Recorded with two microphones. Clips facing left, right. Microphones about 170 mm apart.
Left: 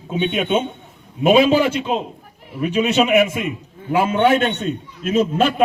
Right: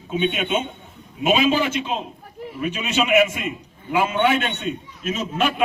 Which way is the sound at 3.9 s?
35° left (ahead or behind).